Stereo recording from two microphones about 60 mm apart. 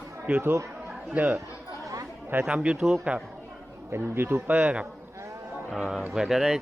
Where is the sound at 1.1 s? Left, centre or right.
Right.